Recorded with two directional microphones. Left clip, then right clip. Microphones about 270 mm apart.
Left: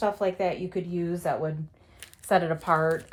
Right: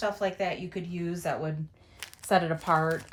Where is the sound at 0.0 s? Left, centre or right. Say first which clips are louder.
Left 3 dB; centre.